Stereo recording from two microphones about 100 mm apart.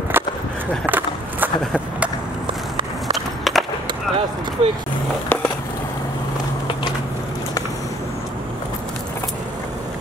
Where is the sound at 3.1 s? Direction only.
Centre (ahead or behind).